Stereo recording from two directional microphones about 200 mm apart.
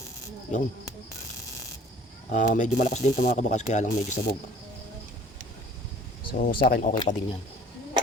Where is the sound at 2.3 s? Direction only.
40° left (ahead or behind).